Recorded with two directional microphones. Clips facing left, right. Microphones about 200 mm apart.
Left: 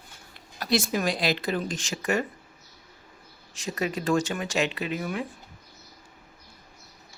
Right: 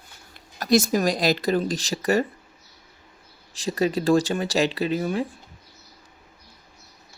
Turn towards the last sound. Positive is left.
turn(degrees=-30)  # may be behind; listen again after turning